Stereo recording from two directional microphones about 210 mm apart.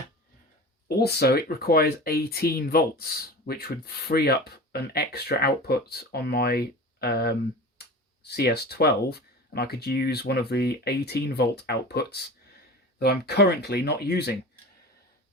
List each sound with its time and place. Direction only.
1.0 s speech: 50° left (ahead or behind)